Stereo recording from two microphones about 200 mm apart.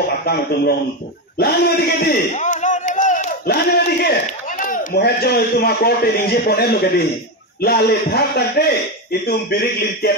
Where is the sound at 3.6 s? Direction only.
50° left (ahead or behind).